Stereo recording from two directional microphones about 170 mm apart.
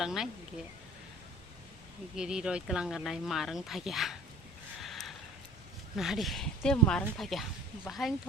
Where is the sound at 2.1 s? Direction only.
5° right (ahead or behind).